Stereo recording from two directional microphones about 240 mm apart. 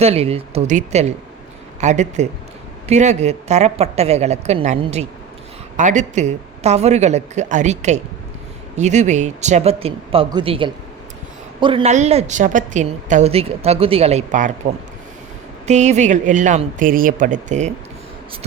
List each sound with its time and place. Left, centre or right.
0.0 s a woman's voice: right
15.6 s speech: right